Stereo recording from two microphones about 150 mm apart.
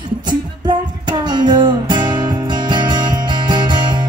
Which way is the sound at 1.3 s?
30° right (ahead or behind).